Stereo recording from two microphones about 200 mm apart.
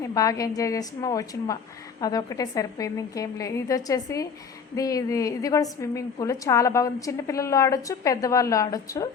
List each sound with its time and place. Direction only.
0.0 s a woman's voice: 15° left (ahead or behind)